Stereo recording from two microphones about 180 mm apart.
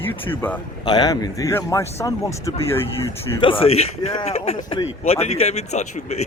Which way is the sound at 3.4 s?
30° left (ahead or behind).